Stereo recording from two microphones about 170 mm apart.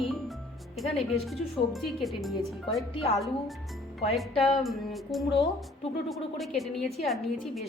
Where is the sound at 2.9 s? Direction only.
35° left (ahead or behind).